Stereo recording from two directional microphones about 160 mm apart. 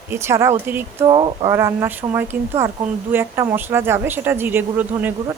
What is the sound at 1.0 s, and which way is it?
Speech, 30° right (ahead or behind).